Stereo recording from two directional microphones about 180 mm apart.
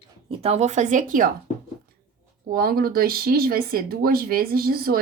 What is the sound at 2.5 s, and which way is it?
Speech, 55° right (ahead or behind).